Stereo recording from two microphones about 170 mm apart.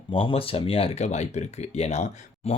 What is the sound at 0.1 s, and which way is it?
Speech, 30° left (ahead or behind).